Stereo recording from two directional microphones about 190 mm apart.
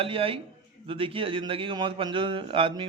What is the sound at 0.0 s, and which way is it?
A man's voice, 30° right (ahead or behind).